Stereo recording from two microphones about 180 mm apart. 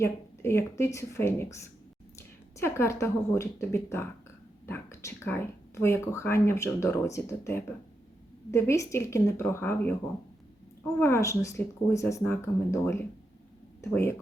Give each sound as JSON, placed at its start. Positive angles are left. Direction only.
{"t": 0.0, "sound": "speech", "side_deg": 15}
{"t": 11.0, "sound": "speech", "side_deg": 15}